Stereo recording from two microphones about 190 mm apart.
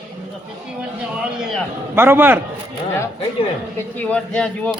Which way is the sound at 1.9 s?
10° right (ahead or behind).